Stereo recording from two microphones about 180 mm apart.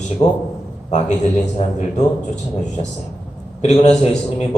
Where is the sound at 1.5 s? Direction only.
40° left (ahead or behind).